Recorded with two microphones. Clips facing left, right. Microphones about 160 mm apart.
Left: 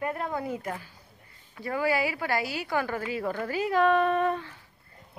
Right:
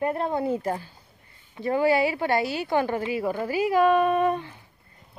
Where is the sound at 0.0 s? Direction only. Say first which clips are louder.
Right 6 dB; 30° right (ahead or behind).